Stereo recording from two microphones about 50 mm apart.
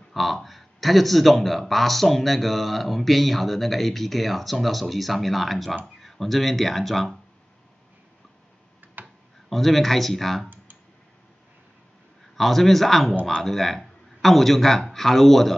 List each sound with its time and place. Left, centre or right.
0.1 s speech: centre
9.0 s speech: centre
12.4 s a man's voice: centre